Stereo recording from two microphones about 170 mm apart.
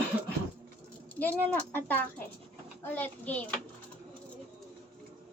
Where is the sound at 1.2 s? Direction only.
10° left (ahead or behind).